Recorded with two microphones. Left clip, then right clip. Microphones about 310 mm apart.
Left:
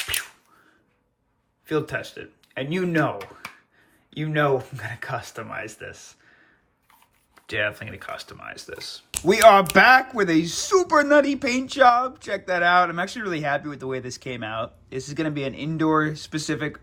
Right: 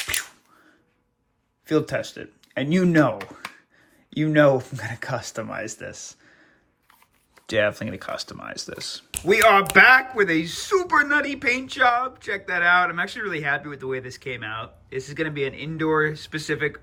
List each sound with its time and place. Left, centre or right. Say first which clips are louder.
1.6 s speech: right 3 dB; centre
7.4 s speech: right 4 dB; centre
9.2 s speech: left 2 dB; centre